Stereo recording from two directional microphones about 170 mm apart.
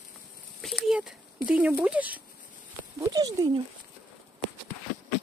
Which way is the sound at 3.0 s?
20° right (ahead or behind).